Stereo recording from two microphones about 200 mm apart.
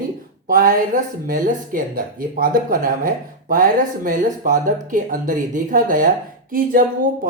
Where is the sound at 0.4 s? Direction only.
45° right (ahead or behind).